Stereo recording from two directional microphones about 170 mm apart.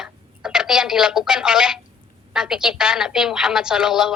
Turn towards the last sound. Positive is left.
turn(degrees=-5)  # may be behind; listen again after turning